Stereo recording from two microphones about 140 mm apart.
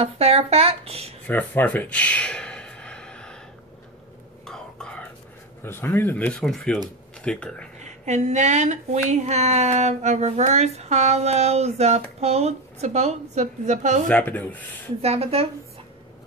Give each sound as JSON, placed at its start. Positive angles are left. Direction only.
{"t": 0.0, "sound": "speech", "side_deg": -45}
{"t": 1.2, "sound": "a sound", "side_deg": 15}
{"t": 4.5, "sound": "throat clearing", "side_deg": 5}
{"t": 5.6, "sound": "speech", "side_deg": 15}
{"t": 7.8, "sound": "speech", "side_deg": -55}
{"t": 14.0, "sound": "speech", "side_deg": 10}
{"t": 15.0, "sound": "speech", "side_deg": -45}